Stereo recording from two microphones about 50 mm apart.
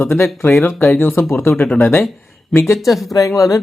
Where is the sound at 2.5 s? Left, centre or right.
Left.